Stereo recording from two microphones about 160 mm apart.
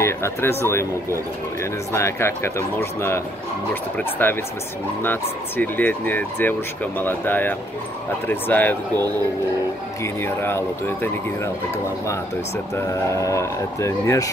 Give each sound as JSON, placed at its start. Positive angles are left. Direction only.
{"t": 0.0, "sound": "speech", "side_deg": 15}
{"t": 10.2, "sound": "speech", "side_deg": 15}
{"t": 12.7, "sound": "speech", "side_deg": 20}